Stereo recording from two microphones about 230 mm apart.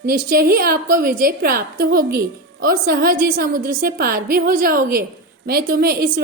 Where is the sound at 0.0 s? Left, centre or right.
Right.